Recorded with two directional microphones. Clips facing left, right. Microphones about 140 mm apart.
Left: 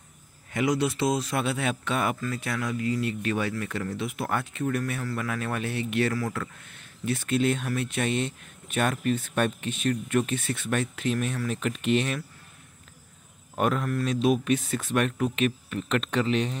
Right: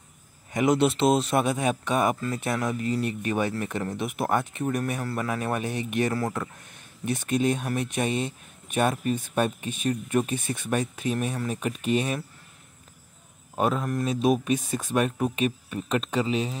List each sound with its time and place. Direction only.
0.5 s speech: 15° right (ahead or behind)
13.7 s speech: 20° right (ahead or behind)